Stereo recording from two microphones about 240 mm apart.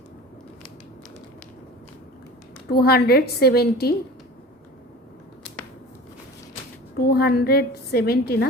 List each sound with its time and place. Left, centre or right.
2.6 s a woman's voice: left
7.0 s a woman's voice: left